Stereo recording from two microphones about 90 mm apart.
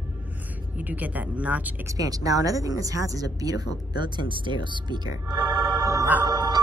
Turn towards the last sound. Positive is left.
turn(degrees=-50)  # may be behind; listen again after turning